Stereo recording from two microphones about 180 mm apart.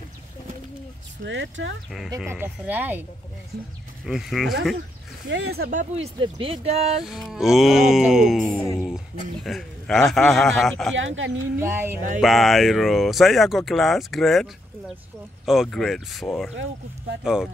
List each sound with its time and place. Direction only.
1.2 s speech: 90° right
1.9 s speech: centre (ahead or behind)
5.3 s speech: 65° right (ahead or behind)
6.1 s speech: 30° right (ahead or behind)
7.1 s speech: centre (ahead or behind)
8.5 s speech: 10° left (ahead or behind)
8.8 s speech: centre (ahead or behind)
11.0 s speech: 90° right
11.6 s speech: 15° right (ahead or behind)
12.2 s speech: centre (ahead or behind)